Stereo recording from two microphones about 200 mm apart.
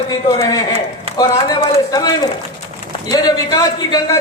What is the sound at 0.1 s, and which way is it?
A man's voice, 20° left (ahead or behind).